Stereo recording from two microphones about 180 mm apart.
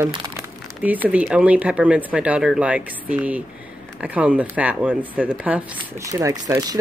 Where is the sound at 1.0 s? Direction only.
5° right (ahead or behind).